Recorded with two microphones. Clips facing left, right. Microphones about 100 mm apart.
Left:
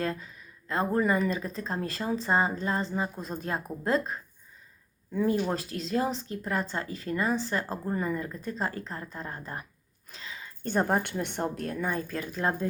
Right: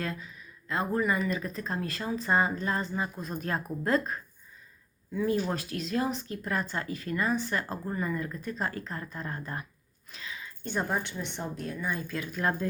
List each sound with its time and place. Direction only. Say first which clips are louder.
0.0 s speech: left 4 dB; 35° left (ahead or behind)
10.1 s a sound: right 1 dB; 30° left (ahead or behind)
10.6 s a woman's voice: left 5 dB; 45° left (ahead or behind)
12.4 s speech: left 1 dB; 25° left (ahead or behind)